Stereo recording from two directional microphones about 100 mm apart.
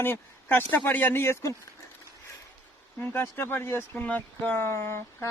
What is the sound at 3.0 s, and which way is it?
Speech, 20° left (ahead or behind).